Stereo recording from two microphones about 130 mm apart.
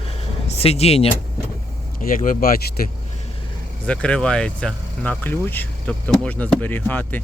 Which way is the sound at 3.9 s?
10° left (ahead or behind).